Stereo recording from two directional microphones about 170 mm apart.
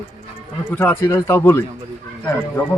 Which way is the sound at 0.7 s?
10° left (ahead or behind).